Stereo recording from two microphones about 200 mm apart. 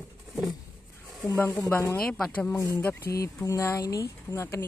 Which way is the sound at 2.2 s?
5° left (ahead or behind).